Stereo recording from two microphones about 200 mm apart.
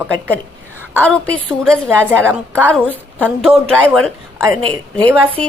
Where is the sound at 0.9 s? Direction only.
5° left (ahead or behind).